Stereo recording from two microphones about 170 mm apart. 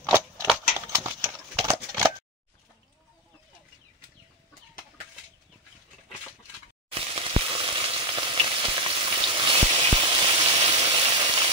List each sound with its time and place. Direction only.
0.7 s horse: 10° right (ahead or behind)
1.6 s a sound: 20° right (ahead or behind)
6.9 s frying: 35° right (ahead or behind)